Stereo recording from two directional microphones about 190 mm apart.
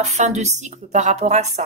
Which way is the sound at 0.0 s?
35° right (ahead or behind).